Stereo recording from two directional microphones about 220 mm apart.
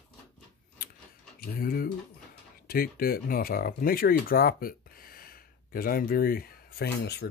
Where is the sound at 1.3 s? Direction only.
40° left (ahead or behind).